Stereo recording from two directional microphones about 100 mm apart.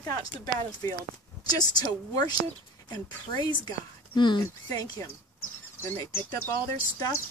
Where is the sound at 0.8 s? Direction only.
30° left (ahead or behind).